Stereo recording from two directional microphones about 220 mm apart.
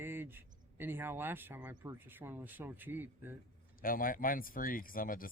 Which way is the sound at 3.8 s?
40° left (ahead or behind).